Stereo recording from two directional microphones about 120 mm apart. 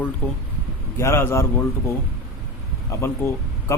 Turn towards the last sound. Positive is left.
turn(degrees=20)  # may be behind; listen again after turning